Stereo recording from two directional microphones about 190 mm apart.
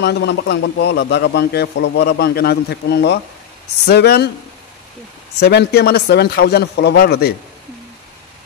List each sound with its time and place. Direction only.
0.0 s a man's voice: 65° left (ahead or behind)
5.4 s a man's voice: 60° left (ahead or behind)